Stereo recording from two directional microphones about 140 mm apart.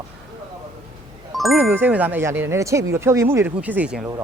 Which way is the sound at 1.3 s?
Centre (ahead or behind).